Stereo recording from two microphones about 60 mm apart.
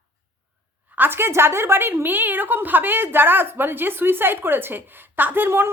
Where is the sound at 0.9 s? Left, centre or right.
Right.